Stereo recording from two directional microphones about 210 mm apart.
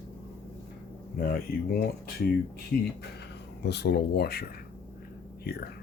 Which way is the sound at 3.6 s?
50° left (ahead or behind).